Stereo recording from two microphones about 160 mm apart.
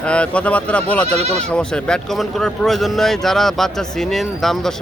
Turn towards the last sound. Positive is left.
turn(degrees=0)  # may be behind; listen again after turning